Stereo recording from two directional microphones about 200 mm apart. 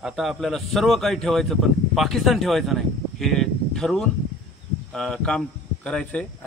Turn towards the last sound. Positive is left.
turn(degrees=5)  # may be behind; listen again after turning